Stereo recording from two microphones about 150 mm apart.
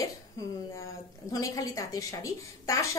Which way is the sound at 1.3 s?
25° left (ahead or behind).